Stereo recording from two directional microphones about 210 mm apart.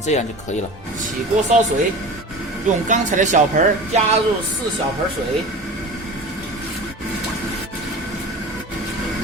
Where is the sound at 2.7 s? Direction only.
35° right (ahead or behind).